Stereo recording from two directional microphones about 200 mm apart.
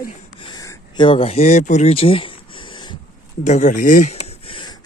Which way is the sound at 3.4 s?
35° left (ahead or behind).